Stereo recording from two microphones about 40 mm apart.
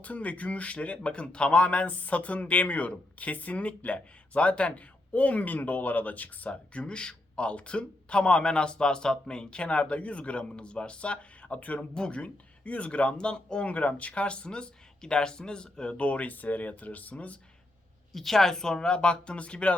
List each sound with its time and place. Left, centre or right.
0.0 s speech: left
6.5 s speech: left
16.0 s speech: left
18.1 s speech: centre; by 19.7 s left